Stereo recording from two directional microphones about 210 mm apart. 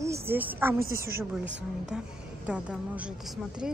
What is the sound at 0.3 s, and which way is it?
Speech, 10° right (ahead or behind).